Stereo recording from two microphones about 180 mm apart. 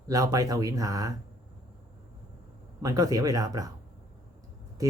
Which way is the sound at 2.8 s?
20° right (ahead or behind).